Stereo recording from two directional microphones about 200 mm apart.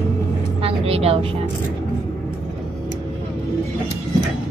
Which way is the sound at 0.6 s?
30° right (ahead or behind).